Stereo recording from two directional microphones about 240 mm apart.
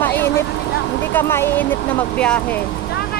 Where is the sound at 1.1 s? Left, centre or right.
Centre.